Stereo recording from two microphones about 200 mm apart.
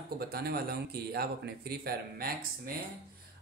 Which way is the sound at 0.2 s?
50° right (ahead or behind).